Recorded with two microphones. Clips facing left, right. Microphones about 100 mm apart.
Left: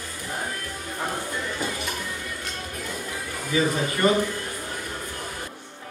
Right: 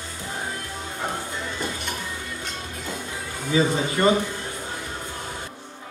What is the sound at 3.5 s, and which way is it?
Speech, 25° right (ahead or behind).